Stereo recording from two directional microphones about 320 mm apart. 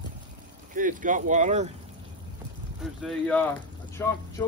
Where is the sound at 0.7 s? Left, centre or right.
Right.